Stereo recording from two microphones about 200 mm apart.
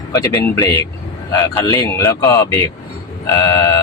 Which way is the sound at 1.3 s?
10° left (ahead or behind).